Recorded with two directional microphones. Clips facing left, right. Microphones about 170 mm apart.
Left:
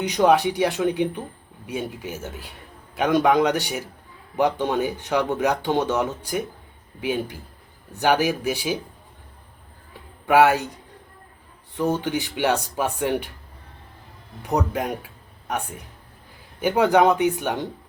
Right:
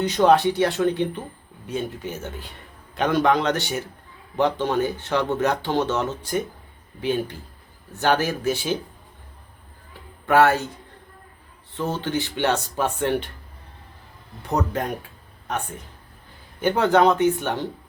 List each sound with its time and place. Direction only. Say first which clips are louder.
0.0 s speech: right 1 dB; 10° left (ahead or behind)
10.2 s speech: left 1 dB; 10° left (ahead or behind)
11.7 s speech: left 2 dB; 15° left (ahead or behind)
14.5 s speech: left 1 dB; 10° left (ahead or behind)
16.6 s speech: left 1 dB; 10° left (ahead or behind)